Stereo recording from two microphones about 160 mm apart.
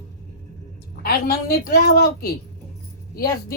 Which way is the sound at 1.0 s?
70° left (ahead or behind).